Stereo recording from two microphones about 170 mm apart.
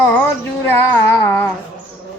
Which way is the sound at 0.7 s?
10° left (ahead or behind).